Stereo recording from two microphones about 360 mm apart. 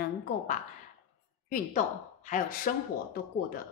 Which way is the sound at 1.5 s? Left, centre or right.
Centre.